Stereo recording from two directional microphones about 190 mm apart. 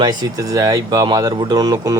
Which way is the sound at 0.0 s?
20° right (ahead or behind).